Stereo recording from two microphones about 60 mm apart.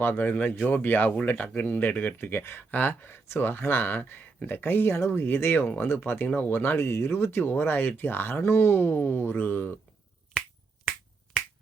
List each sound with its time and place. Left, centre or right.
0.0 s speech: left